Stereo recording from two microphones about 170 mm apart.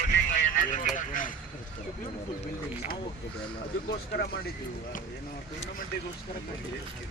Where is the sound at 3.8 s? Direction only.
75° left (ahead or behind).